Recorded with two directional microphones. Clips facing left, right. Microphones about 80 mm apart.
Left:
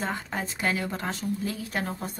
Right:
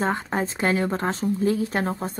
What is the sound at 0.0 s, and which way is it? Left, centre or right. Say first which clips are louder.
Speech: right 7 dB; right.